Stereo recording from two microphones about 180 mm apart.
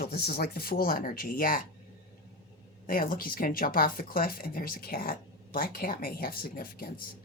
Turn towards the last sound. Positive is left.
turn(degrees=55)  # may be behind; listen again after turning